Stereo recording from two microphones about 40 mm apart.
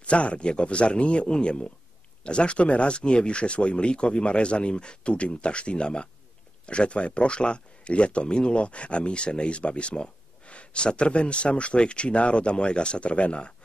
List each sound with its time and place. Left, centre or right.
0.0 s speech: left